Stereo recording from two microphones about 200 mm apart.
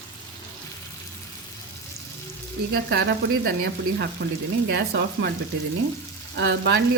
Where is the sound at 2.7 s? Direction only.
50° right (ahead or behind).